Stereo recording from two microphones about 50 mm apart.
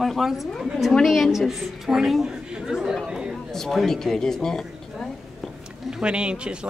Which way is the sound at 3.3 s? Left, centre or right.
Centre.